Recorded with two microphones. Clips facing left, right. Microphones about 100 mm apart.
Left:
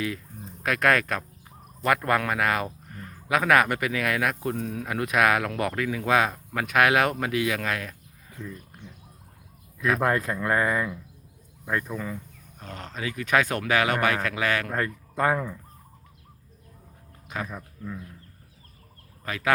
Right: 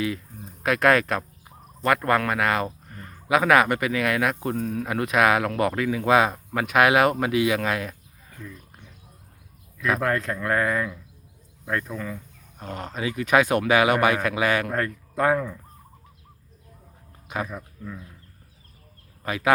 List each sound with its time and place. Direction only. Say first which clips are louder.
0.6 s speech: right 3 dB; 5° right (ahead or behind)
10.0 s speech: even; 10° left (ahead or behind)
12.5 s speech: right 5 dB; 10° right (ahead or behind)
14.7 s speech: right 2 dB; centre (ahead or behind)
17.2 s a sound: right 4 dB; 10° right (ahead or behind)
19.2 s speech: right 4 dB; 15° right (ahead or behind)